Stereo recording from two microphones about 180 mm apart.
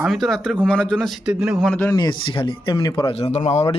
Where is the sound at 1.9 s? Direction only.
25° left (ahead or behind).